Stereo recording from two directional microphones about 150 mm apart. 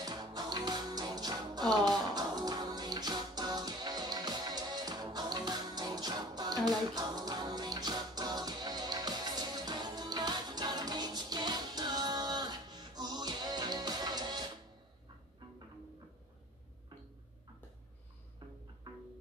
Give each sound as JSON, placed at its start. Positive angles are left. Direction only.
{"t": 0.0, "sound": "music", "side_deg": -25}